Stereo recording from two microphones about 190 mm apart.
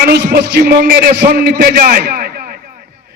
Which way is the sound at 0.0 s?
55° right (ahead or behind).